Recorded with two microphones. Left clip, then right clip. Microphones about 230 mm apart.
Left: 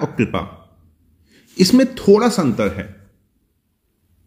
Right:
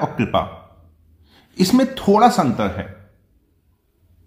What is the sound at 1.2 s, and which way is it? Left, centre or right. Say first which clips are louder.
A man's voice: left 4 dB; centre.